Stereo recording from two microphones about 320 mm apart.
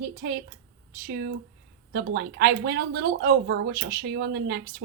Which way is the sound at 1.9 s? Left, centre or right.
Right.